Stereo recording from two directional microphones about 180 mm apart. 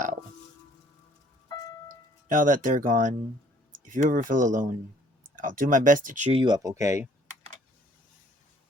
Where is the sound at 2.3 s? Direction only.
45° right (ahead or behind).